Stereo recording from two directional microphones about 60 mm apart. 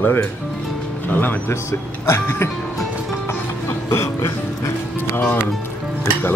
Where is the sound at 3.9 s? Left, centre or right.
Left.